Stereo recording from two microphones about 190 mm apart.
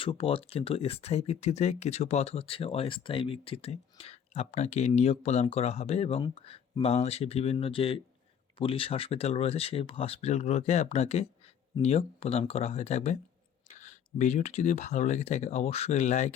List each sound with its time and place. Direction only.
0.0 s speech: 30° left (ahead or behind)